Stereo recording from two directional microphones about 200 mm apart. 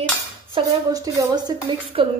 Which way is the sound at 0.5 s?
20° right (ahead or behind).